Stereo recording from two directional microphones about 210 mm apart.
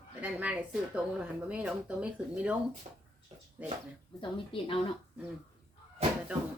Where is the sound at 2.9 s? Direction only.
20° right (ahead or behind).